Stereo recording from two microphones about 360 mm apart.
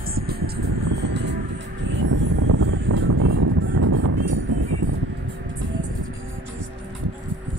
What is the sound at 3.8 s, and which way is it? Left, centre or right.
Music, right.